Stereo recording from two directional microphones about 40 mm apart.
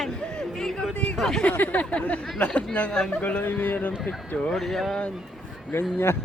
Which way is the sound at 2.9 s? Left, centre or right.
Centre.